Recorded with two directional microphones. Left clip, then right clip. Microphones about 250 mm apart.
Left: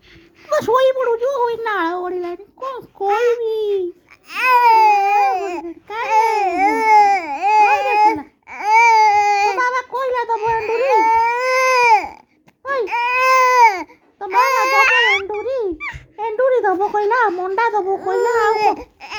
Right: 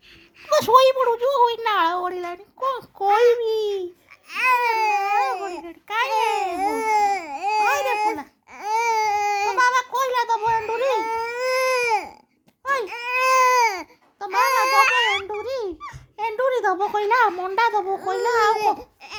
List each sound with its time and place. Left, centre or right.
0.4 s a woman's voice: centre
4.3 s babbling: centre
5.3 s baby cry: centre
5.6 s babbling: centre
6.3 s baby cry: centre
8.4 s babbling: centre
10.0 s baby cry: centre
15.5 s dog: centre
16.8 s a sound: centre
17.1 s a sound: centre
17.3 s a child's voice: centre